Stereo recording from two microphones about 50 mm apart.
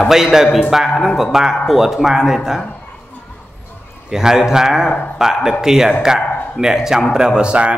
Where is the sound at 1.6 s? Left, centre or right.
Centre.